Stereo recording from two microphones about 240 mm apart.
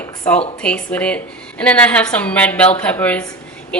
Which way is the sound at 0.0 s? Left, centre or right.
Centre.